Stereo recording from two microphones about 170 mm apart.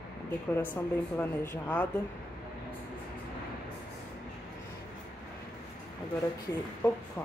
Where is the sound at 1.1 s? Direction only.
10° left (ahead or behind).